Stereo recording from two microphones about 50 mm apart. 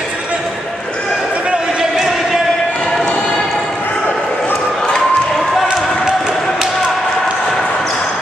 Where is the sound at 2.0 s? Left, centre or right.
Centre.